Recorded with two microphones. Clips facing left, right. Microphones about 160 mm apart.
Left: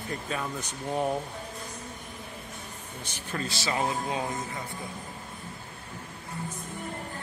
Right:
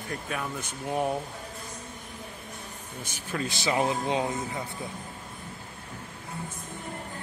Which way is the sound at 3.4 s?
20° right (ahead or behind).